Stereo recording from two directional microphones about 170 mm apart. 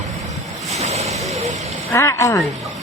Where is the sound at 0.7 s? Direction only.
40° right (ahead or behind).